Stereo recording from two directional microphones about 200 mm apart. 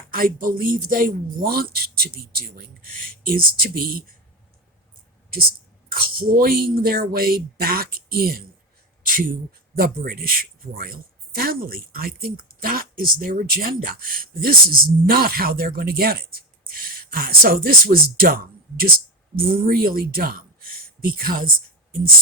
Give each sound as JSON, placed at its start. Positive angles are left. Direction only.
{"t": 0.1, "sound": "a man's voice", "side_deg": -45}
{"t": 5.9, "sound": "a man's voice", "side_deg": -50}